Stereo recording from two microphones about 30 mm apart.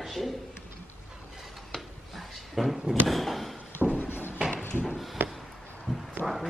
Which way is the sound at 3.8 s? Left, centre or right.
Right.